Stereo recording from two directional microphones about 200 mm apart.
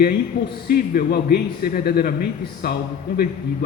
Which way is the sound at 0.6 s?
45° left (ahead or behind).